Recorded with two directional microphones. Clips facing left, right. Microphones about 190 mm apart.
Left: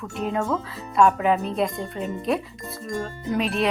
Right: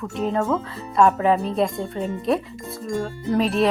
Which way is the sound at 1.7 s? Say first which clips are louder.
Right 3 dB; centre (ahead or behind).